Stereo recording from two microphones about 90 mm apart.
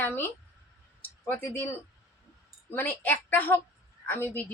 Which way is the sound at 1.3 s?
25° left (ahead or behind).